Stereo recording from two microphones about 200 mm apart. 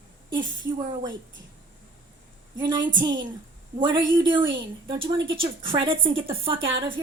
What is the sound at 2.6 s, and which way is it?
A woman's voice, 20° right (ahead or behind).